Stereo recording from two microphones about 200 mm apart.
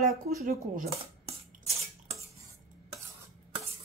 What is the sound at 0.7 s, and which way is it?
Coin, 30° right (ahead or behind).